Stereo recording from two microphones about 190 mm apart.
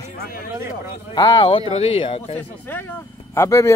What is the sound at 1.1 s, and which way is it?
A man's voice, 20° left (ahead or behind).